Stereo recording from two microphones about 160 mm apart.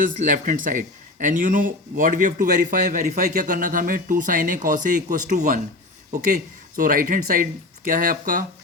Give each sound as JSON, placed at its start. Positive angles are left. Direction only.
{"t": 0.0, "sound": "speech", "side_deg": -55}